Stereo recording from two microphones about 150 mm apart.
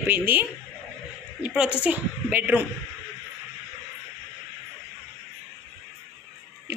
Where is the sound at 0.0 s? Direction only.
15° right (ahead or behind).